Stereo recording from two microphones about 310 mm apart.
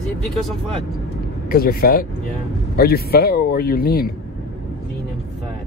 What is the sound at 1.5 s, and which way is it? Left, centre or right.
Speech, left.